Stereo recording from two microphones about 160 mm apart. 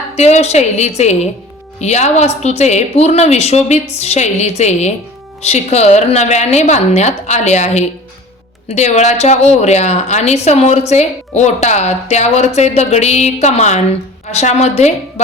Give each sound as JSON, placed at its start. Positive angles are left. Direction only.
{"t": 0.2, "sound": "a woman's voice", "side_deg": 40}